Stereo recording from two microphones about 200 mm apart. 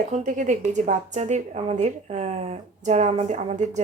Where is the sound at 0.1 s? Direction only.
35° right (ahead or behind).